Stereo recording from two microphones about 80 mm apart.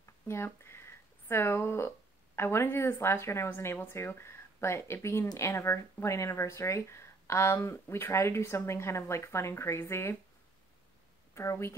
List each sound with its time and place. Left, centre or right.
0.3 s speech: left
11.3 s speech: left